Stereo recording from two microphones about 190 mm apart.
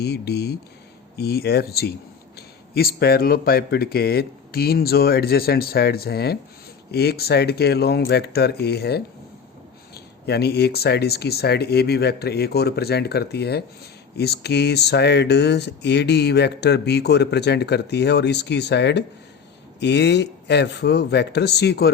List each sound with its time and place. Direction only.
0.0 s speech: 60° left (ahead or behind)